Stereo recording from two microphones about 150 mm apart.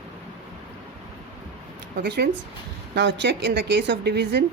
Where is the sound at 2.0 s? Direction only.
90° right.